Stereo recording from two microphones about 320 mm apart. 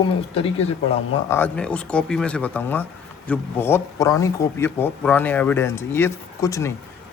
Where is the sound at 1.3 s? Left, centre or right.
Centre.